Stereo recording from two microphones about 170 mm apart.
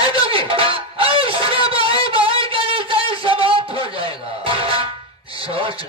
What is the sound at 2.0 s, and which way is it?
Music, 30° right (ahead or behind).